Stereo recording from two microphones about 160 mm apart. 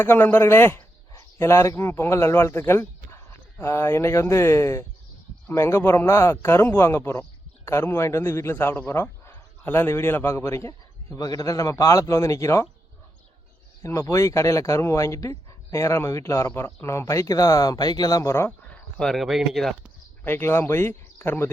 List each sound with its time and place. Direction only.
0.0 s a man's voice: 10° left (ahead or behind)
13.8 s a man's voice: 15° left (ahead or behind); by 19.9 s centre (ahead or behind)
20.2 s a man's voice: 15° left (ahead or behind)